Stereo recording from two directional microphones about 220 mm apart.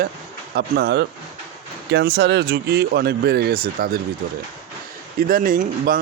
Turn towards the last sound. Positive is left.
turn(degrees=-40)  # may be behind; listen again after turning